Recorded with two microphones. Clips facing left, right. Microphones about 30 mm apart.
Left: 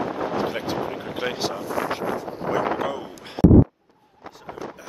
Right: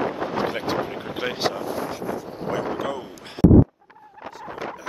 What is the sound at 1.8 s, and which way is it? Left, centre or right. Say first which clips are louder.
Vehicle: left 3 dB; left.